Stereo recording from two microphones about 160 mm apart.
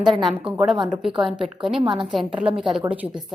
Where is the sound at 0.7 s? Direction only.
30° right (ahead or behind).